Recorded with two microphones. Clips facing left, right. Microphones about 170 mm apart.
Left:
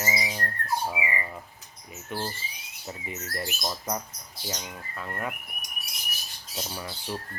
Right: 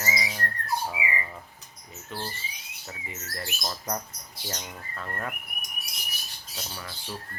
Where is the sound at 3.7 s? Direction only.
5° left (ahead or behind).